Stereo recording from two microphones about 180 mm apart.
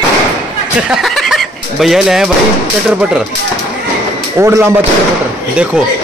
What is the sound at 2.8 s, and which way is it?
Speech, 5° right (ahead or behind).